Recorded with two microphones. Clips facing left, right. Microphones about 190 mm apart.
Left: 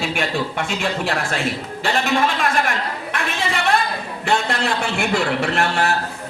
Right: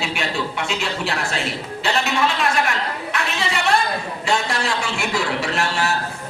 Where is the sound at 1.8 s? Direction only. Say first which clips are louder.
Left 2 dB; 50° left (ahead or behind).